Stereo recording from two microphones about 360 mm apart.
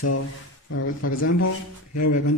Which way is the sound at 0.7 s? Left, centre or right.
Left.